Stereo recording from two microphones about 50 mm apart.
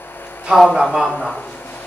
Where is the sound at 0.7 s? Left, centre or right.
Centre.